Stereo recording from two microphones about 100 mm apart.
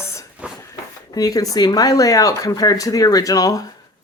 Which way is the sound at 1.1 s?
40° left (ahead or behind).